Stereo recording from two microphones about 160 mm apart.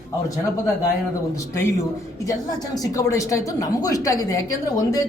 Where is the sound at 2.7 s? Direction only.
20° left (ahead or behind).